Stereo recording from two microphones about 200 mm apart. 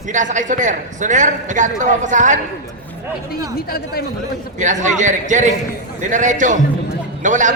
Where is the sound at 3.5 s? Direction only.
50° left (ahead or behind).